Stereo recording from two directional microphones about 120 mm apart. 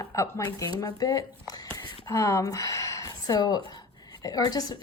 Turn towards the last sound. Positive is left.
turn(degrees=30)  # may be behind; listen again after turning